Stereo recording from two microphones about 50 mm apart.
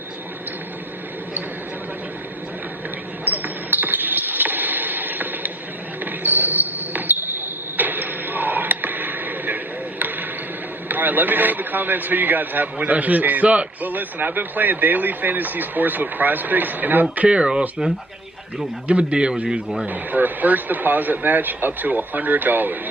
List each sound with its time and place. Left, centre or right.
3.2 s basketball bounce: right
7.8 s a sound: right
10.8 s a man's voice: right
17.2 s a man's voice: centre
19.9 s a man's voice: right